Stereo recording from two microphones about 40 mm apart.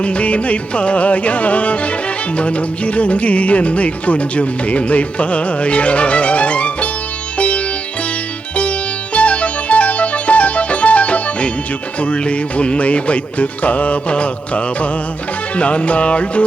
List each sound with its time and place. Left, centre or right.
0.0 s music: left
9.1 s music: left